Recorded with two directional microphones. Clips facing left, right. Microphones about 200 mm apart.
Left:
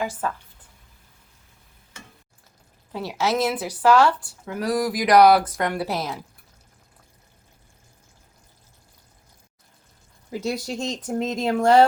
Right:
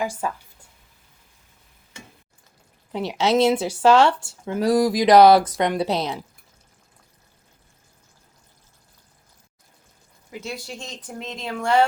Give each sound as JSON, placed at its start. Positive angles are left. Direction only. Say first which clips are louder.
{"t": 0.2, "sound": "speech", "louder": "even", "side_deg": -10}
{"t": 2.9, "sound": "speech", "louder": "right 4 dB", "side_deg": -20}
{"t": 10.3, "sound": "speech", "louder": "left 7 dB", "side_deg": 40}